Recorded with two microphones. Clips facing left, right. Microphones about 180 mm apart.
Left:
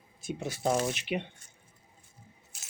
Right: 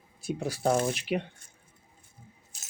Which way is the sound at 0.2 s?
35° right (ahead or behind).